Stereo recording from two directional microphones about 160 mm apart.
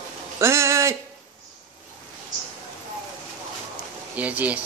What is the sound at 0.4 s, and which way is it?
Speech, 15° right (ahead or behind).